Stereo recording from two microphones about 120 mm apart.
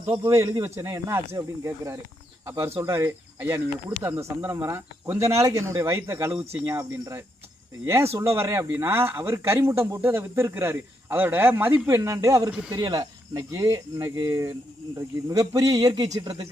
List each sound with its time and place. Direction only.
0.2 s a man's voice: 25° right (ahead or behind)